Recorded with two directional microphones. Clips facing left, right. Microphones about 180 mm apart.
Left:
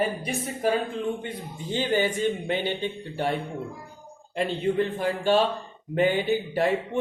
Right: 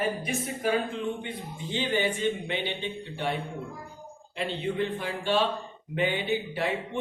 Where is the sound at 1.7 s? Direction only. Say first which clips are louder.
Left 3 dB; 45° left (ahead or behind).